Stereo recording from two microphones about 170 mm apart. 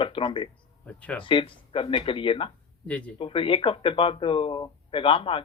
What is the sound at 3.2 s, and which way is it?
Speech, 30° left (ahead or behind).